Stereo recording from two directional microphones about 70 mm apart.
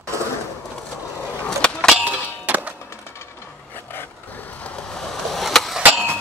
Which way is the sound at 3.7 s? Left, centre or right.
Left.